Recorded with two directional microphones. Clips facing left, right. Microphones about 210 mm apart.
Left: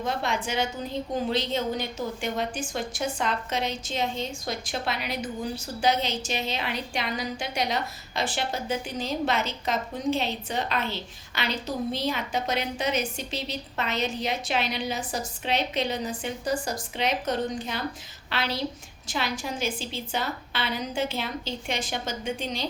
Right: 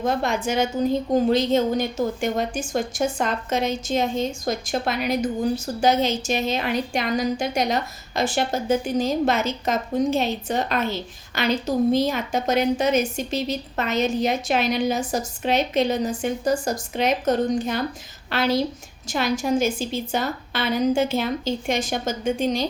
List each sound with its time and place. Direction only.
0.0 s a woman's voice: 45° right (ahead or behind)